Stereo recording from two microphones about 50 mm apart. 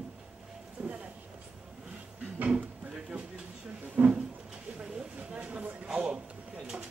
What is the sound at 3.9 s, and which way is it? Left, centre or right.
Speech, right.